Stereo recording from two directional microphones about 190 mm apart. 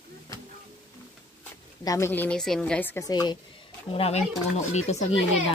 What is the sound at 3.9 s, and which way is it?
Speech, 30° left (ahead or behind).